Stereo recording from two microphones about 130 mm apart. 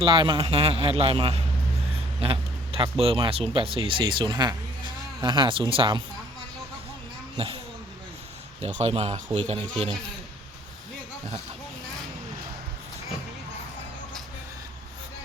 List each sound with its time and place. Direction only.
0.0 s speech: 40° right (ahead or behind)
2.2 s a sound: 45° right (ahead or behind)
3.0 s speech: 45° right (ahead or behind)
7.3 s speech: 45° right (ahead or behind)
8.6 s speech: 55° right (ahead or behind)